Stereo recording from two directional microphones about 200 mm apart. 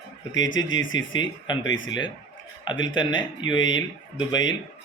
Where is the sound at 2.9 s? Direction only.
25° left (ahead or behind).